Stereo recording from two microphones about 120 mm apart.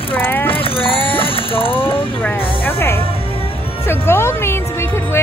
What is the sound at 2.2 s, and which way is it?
Music, 15° left (ahead or behind).